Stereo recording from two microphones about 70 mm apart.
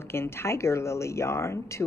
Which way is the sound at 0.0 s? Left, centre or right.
Left.